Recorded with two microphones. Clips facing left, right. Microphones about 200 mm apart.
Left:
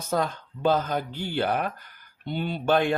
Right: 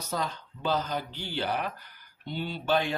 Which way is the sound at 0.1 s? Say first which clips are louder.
Left 7 dB; 50° left (ahead or behind).